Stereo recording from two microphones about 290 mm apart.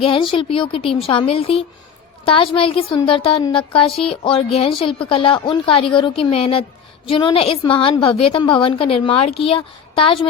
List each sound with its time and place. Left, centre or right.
0.0 s a woman's voice: centre